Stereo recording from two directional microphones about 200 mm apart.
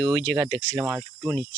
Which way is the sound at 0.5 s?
5° left (ahead or behind).